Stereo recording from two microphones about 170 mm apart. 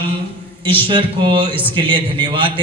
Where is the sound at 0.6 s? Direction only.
30° right (ahead or behind).